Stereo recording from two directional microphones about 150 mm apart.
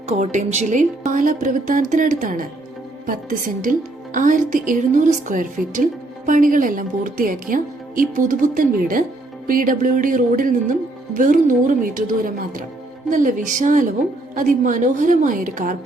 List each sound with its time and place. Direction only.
0.1 s a woman's voice: 50° right (ahead or behind)